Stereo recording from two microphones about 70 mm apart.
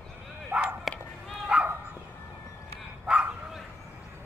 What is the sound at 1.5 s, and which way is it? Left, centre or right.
Bow-wow, centre.